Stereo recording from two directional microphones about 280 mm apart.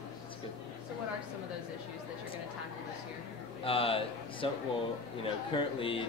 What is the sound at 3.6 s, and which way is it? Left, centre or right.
Speech, centre.